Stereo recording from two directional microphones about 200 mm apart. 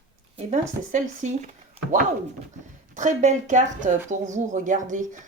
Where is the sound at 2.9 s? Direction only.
40° right (ahead or behind).